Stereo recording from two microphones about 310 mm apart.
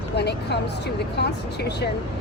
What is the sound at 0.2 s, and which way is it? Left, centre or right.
Speech, left.